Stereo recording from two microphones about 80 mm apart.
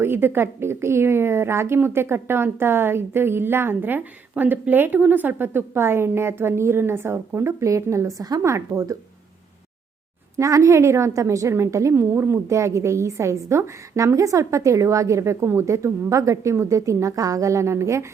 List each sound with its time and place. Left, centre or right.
0.0 s a woman's voice: right
10.3 s a woman's voice: right